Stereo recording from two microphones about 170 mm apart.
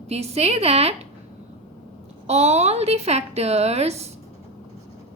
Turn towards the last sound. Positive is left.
turn(degrees=-40)  # may be behind; listen again after turning